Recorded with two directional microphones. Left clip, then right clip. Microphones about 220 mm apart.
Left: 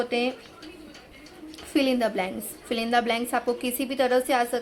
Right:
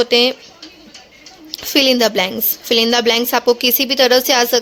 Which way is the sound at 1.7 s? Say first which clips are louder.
Right 11 dB; 45° right (ahead or behind).